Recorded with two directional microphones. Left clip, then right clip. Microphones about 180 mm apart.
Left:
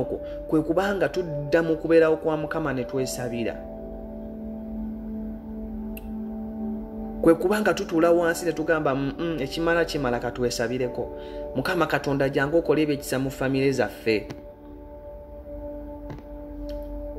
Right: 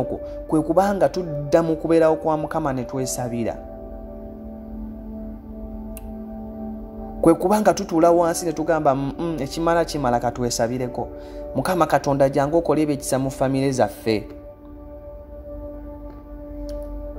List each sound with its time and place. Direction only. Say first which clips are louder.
0.3 s speech: right 3 dB; 30° right (ahead or behind)
7.2 s speech: right 3 dB; 30° right (ahead or behind)